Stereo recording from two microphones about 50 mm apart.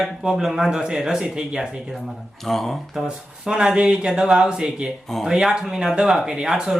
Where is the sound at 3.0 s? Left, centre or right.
Centre.